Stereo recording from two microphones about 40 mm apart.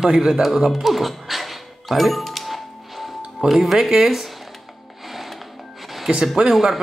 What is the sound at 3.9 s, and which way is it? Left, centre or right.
Speech, centre.